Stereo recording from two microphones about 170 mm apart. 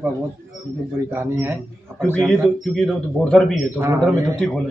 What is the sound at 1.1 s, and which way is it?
Speech, 15° right (ahead or behind).